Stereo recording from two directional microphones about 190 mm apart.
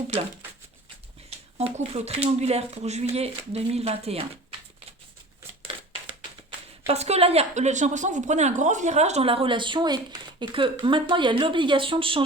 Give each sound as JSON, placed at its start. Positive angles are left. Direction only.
{"t": 1.5, "sound": "speech", "side_deg": -30}
{"t": 6.8, "sound": "speech", "side_deg": -35}